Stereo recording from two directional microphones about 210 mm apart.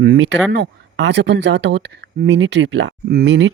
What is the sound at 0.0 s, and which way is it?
Speech, 55° right (ahead or behind).